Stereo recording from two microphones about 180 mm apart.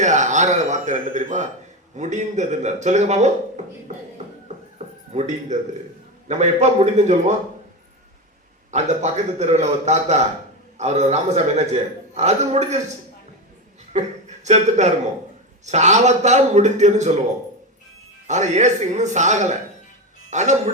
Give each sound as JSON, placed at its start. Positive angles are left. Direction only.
{"t": 0.0, "sound": "a man's voice", "side_deg": -40}
{"t": 5.1, "sound": "a man's voice", "side_deg": -40}
{"t": 8.7, "sound": "a man's voice", "side_deg": -40}
{"t": 13.9, "sound": "a man's voice", "side_deg": -40}
{"t": 18.3, "sound": "a man's voice", "side_deg": -40}